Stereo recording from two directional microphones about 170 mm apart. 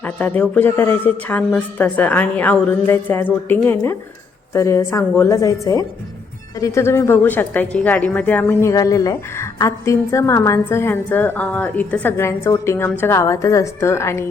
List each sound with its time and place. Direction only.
0.0 s a woman's voice: 10° left (ahead or behind)